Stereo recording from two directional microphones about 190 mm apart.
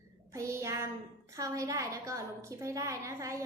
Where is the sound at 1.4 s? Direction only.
15° right (ahead or behind).